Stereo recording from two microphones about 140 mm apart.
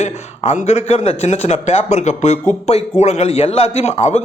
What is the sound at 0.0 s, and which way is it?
A man's voice, 55° left (ahead or behind).